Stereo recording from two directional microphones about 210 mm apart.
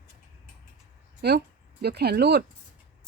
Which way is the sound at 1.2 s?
50° right (ahead or behind).